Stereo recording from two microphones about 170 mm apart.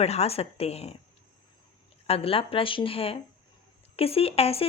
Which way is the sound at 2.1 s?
35° left (ahead or behind).